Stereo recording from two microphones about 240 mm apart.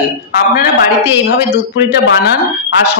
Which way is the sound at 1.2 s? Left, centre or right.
Left.